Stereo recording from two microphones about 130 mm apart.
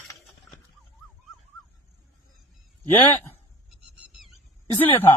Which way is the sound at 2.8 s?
15° left (ahead or behind).